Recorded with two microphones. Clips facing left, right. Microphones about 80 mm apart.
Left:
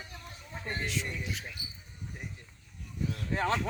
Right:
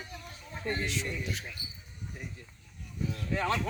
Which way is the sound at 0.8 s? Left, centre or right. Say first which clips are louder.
Right 1 dB; centre.